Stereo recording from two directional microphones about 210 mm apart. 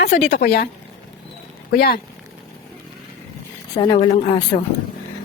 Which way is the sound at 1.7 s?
45° left (ahead or behind).